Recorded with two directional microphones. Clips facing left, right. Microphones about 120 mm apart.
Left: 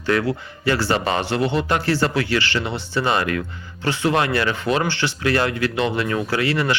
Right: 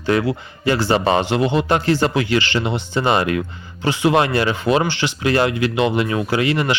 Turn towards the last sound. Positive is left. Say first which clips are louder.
# right 2 dB
turn(degrees=-20)  # may be behind; listen again after turning